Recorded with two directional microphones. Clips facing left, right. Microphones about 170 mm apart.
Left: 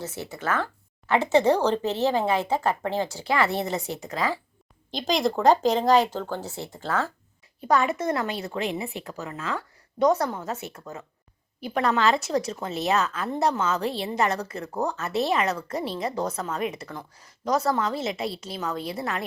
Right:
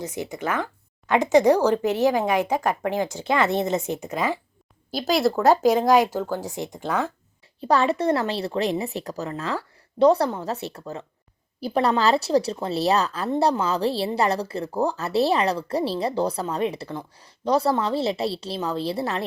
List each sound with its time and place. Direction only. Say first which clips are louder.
0.0 s a woman's voice: right 3 dB; 15° right (ahead or behind)
4.9 s speech: right 3 dB; 5° right (ahead or behind)
7.6 s speech: right 3 dB; 30° right (ahead or behind)